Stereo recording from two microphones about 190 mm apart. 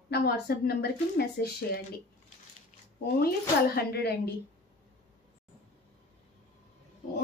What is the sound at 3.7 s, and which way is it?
Speech, 55° left (ahead or behind).